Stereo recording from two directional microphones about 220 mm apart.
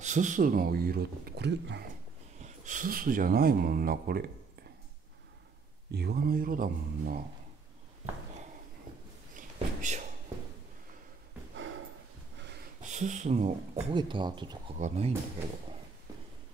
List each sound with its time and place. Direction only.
0.0 s speech: 35° right (ahead or behind)
2.3 s speech: 35° right (ahead or behind)
5.9 s speech: 45° right (ahead or behind)
9.3 s a sound: 35° right (ahead or behind)
12.9 s speech: 35° right (ahead or behind)